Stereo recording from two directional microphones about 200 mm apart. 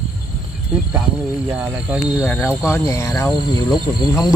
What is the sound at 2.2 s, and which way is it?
Speech, 10° left (ahead or behind).